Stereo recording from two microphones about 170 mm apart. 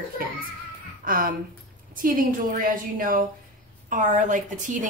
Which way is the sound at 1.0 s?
55° right (ahead or behind).